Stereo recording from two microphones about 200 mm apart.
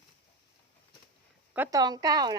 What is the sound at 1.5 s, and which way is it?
Speech, 15° right (ahead or behind).